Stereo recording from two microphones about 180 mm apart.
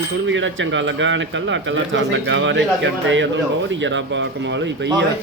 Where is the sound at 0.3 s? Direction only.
90° right.